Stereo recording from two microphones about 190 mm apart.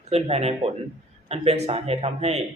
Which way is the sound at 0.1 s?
30° right (ahead or behind).